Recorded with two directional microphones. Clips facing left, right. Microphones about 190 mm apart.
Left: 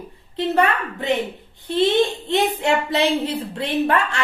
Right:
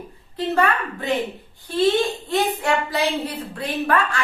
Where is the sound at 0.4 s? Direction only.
20° left (ahead or behind).